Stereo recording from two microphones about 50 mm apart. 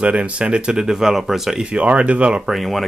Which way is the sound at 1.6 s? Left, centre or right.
Right.